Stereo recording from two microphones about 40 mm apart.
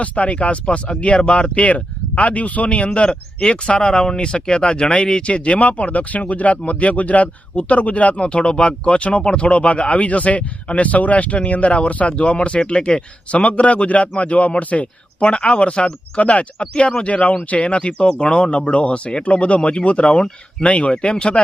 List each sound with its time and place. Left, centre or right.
0.0 s speech: left
15.2 s speech: left